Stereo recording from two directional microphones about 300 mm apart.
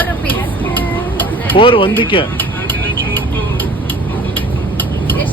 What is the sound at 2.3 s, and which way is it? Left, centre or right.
Vehicle, centre.